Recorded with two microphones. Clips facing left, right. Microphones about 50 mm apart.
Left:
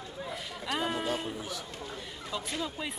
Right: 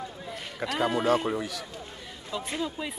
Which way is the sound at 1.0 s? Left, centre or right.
Right.